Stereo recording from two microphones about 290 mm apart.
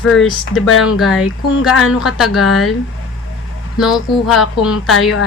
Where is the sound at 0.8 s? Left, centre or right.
Centre.